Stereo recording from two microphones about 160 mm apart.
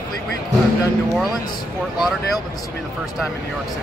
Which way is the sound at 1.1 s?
Centre (ahead or behind).